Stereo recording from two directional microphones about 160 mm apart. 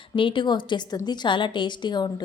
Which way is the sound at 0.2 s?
30° left (ahead or behind).